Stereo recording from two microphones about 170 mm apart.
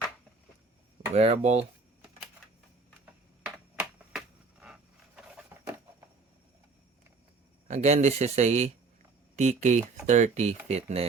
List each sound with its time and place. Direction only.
1.1 s speech: 40° right (ahead or behind)
3.4 s a sound: 5° right (ahead or behind)
7.7 s speech: 40° right (ahead or behind)